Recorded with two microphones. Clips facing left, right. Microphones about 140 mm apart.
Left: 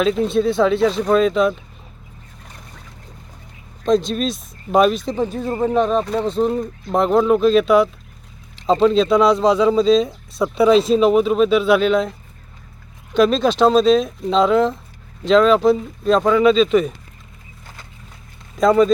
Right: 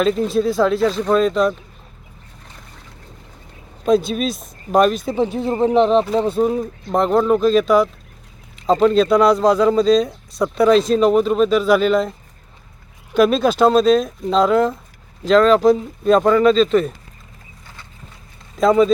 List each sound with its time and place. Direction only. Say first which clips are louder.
0.0 s speech: even; centre (ahead or behind)
3.8 s speech: right 1 dB; 5° right (ahead or behind)
5.1 s speech: right 2 dB; 15° right (ahead or behind)
6.2 s speech: right 1 dB; 5° right (ahead or behind)
13.1 s speech: right 1 dB; 5° right (ahead or behind)
18.6 s speech: even; centre (ahead or behind)